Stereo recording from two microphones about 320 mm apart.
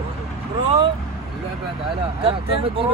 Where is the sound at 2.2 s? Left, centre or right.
Centre.